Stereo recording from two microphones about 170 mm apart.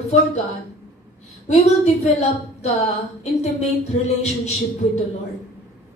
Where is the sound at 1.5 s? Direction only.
40° left (ahead or behind).